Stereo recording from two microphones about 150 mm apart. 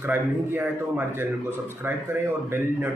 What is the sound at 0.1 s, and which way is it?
Speech, 15° right (ahead or behind).